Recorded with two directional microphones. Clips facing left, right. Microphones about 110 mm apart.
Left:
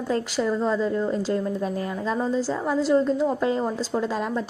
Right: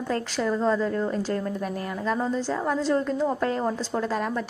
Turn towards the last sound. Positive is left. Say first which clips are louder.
# left 1 dB
turn(degrees=20)  # may be behind; listen again after turning